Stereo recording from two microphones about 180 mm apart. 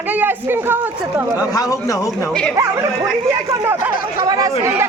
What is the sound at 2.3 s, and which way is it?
Speech, 5° left (ahead or behind).